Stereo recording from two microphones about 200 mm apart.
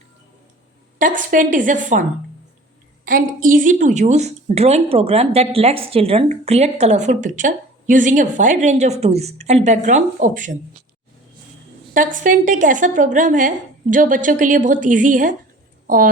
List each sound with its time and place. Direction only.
0.9 s a woman's voice: 40° right (ahead or behind)
11.9 s a woman's voice: 40° right (ahead or behind)